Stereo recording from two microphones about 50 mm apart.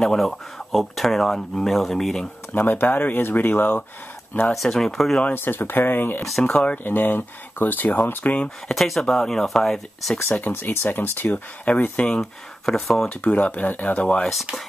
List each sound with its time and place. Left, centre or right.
0.0 s speech: centre
2.5 s speech: left
4.5 s speech: centre
5.3 s speech: left
6.4 s speech: left
6.8 s speech: left
8.6 s speech: centre
10.5 s speech: left
12.0 s speech: centre
13.1 s speech: left